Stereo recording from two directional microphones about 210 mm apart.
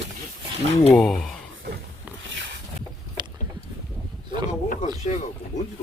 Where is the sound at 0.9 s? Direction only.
Centre (ahead or behind).